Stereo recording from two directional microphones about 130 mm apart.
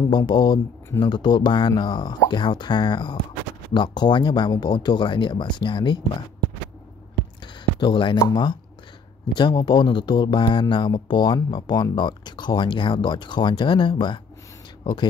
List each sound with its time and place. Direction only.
0.3 s speech: 35° left (ahead or behind)
7.8 s speech: 40° left (ahead or behind)